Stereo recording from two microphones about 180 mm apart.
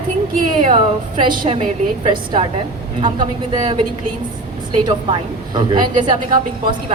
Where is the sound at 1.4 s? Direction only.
35° right (ahead or behind).